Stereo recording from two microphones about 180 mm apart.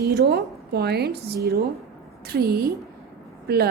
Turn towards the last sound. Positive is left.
turn(degrees=-60)  # may be behind; listen again after turning